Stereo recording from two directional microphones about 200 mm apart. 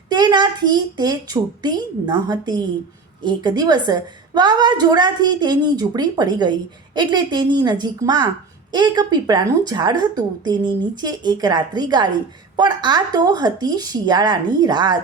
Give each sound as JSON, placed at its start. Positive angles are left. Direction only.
{"t": 0.1, "sound": "a woman's voice", "side_deg": -20}